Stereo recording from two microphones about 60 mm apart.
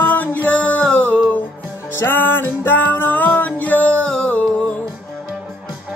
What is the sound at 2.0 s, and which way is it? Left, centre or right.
Music, left.